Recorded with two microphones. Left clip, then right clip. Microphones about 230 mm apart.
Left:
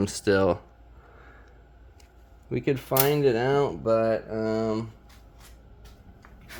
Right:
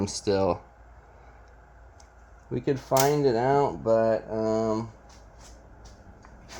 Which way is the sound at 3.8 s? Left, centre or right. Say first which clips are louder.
Right 1 dB; left.